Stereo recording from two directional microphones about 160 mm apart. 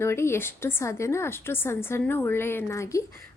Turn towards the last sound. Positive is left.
turn(degrees=20)  # may be behind; listen again after turning